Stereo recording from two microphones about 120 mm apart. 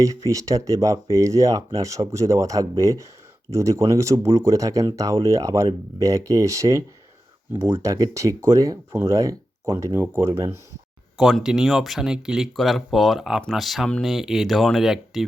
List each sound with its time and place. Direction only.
0.0 s speech: 25° right (ahead or behind)
11.3 s speech: 5° right (ahead or behind)